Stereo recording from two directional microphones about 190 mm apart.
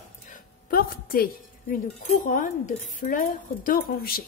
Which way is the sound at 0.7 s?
50° left (ahead or behind).